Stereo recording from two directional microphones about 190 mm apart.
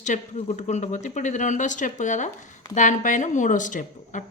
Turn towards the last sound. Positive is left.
turn(degrees=40)  # may be behind; listen again after turning